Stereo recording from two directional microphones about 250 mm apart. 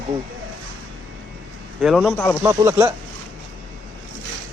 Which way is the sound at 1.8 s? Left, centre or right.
Centre.